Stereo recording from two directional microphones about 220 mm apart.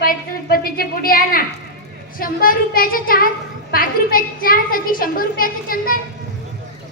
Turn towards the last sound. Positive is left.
turn(degrees=40)  # may be behind; listen again after turning